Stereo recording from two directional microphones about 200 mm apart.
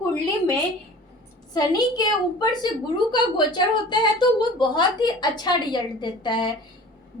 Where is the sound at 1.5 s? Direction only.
20° left (ahead or behind).